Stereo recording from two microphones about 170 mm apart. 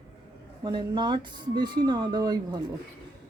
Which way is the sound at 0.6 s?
25° right (ahead or behind).